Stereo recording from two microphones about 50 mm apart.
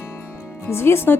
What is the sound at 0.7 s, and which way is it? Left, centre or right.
Speech, left.